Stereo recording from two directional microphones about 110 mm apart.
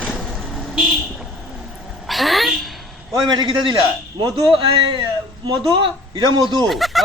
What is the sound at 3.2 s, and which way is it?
A man's voice, 45° right (ahead or behind).